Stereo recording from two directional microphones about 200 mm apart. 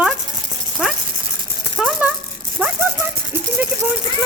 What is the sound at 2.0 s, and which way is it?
Rattle, 5° right (ahead or behind).